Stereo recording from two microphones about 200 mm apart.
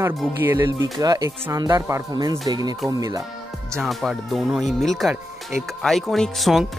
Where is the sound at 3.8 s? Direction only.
Centre (ahead or behind).